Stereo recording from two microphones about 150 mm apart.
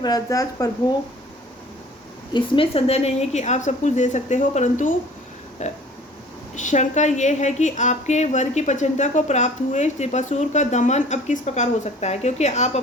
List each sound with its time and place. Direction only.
0.0 s speech: 25° left (ahead or behind)
2.3 s a woman's voice: 40° left (ahead or behind)